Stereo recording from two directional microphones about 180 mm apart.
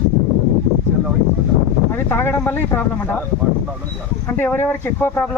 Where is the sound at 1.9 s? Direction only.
10° left (ahead or behind).